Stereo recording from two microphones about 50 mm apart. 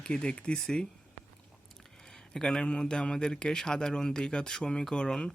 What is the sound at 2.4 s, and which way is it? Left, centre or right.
Speech, centre.